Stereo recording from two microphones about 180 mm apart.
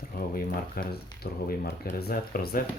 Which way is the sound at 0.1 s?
55° left (ahead or behind).